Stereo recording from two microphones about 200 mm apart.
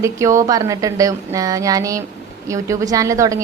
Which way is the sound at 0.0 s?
15° right (ahead or behind).